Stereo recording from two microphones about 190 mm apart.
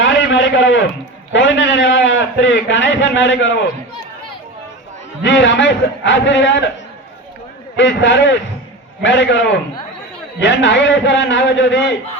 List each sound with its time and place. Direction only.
0.0 s a sound: 75° left (ahead or behind)
1.3 s a man's voice: 75° left (ahead or behind)
5.2 s a man's voice: 70° left (ahead or behind)
7.8 s a man's voice: 70° left (ahead or behind)